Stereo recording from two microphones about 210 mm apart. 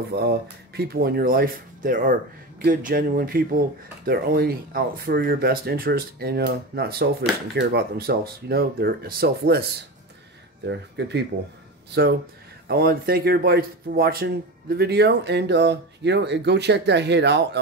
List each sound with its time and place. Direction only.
0.1 s speech: 50° right (ahead or behind)